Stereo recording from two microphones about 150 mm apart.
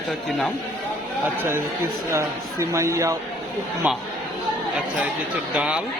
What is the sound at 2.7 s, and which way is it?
Speech, 20° right (ahead or behind).